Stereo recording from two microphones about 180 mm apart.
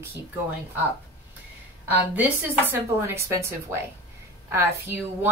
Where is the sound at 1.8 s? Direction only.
10° right (ahead or behind).